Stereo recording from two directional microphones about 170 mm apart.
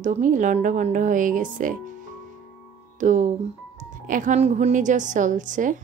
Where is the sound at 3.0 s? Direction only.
45° right (ahead or behind).